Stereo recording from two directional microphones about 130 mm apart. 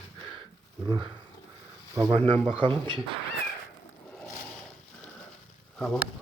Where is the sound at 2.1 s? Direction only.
50° right (ahead or behind).